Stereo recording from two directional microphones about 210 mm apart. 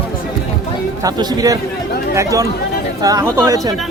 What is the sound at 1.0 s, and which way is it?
Speech, 20° right (ahead or behind).